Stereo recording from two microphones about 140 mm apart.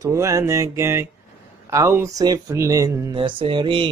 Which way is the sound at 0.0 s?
20° right (ahead or behind).